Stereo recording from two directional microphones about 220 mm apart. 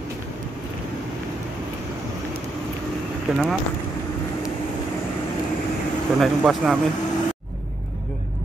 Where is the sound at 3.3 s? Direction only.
Centre (ahead or behind).